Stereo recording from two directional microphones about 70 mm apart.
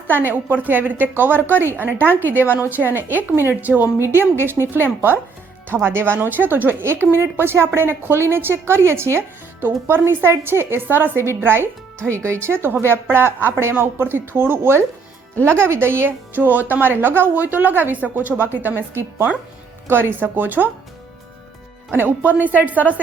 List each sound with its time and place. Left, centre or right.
0.1 s a woman's voice: right
12.1 s a woman's voice: right
21.9 s speech: right